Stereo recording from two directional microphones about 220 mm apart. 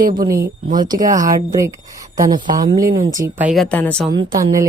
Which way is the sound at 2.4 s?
35° right (ahead or behind).